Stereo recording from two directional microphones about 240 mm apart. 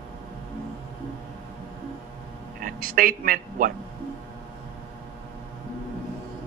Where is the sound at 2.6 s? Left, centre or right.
Right.